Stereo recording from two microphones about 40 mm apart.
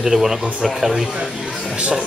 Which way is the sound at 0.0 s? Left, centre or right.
Centre.